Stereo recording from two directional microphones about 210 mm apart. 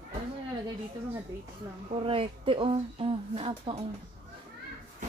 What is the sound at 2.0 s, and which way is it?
Speech, 25° right (ahead or behind).